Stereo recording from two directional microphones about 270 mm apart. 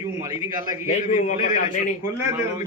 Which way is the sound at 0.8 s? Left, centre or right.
Left.